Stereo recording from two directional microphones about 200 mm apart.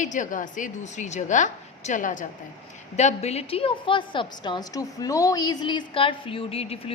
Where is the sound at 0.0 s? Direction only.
40° left (ahead or behind).